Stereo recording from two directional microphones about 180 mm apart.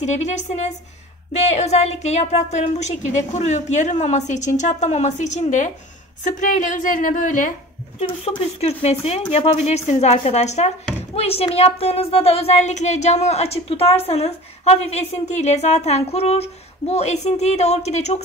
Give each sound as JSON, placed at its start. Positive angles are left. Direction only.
{"t": 0.0, "sound": "a woman's voice", "side_deg": 40}
{"t": 8.0, "sound": "a woman's voice", "side_deg": 35}